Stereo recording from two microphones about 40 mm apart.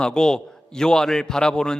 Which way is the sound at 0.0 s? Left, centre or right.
Centre.